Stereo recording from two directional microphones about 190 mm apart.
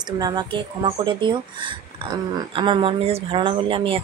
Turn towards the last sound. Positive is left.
turn(degrees=-25)  # may be behind; listen again after turning